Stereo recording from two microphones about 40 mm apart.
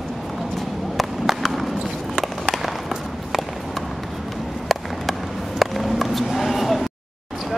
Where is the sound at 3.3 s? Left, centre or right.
Centre.